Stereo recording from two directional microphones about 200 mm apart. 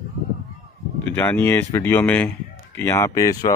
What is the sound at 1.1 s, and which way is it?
Speech, 10° left (ahead or behind).